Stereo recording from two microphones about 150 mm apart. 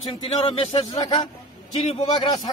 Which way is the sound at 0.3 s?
35° left (ahead or behind).